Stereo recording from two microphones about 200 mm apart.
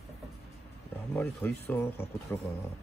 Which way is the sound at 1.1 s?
10° left (ahead or behind).